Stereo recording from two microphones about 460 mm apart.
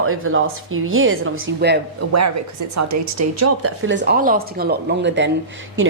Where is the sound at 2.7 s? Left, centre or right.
Right.